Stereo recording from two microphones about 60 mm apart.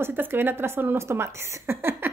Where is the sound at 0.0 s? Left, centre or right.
Right.